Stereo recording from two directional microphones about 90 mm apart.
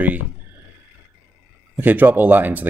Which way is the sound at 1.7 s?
20° right (ahead or behind).